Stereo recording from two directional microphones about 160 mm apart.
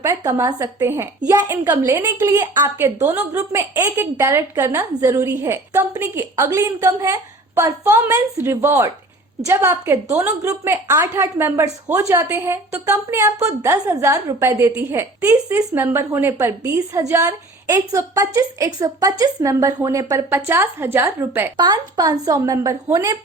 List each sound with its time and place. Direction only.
0.0 s a woman's voice: 20° right (ahead or behind)
21.6 s a woman's voice: 25° right (ahead or behind)